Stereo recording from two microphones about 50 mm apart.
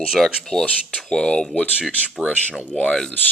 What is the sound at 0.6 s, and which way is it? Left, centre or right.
Speech, left.